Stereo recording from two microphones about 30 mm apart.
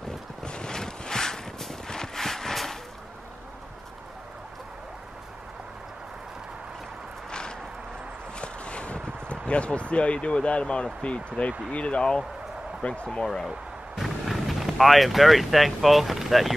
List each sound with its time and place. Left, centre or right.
0.4 s boat: left
1.9 s horse: centre
7.2 s a sound: left
9.5 s speech: left
13.9 s speech: centre